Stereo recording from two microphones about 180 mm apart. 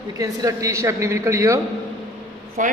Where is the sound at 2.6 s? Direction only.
45° right (ahead or behind).